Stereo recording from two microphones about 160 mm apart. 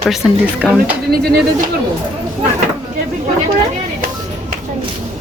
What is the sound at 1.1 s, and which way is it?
Speech, 80° right.